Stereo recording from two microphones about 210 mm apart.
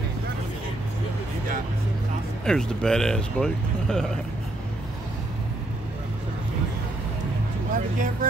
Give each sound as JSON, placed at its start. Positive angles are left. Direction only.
{"t": 2.4, "sound": "speech", "side_deg": 5}
{"t": 7.7, "sound": "music", "side_deg": -40}